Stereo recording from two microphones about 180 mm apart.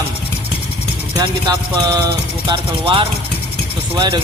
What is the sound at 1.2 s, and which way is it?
Speech, 20° right (ahead or behind).